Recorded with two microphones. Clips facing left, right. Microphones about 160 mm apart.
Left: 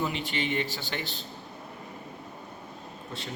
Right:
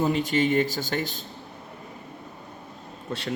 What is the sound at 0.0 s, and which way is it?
A man's voice, 40° right (ahead or behind).